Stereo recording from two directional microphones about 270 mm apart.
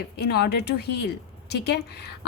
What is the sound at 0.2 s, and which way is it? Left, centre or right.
A woman's voice, left.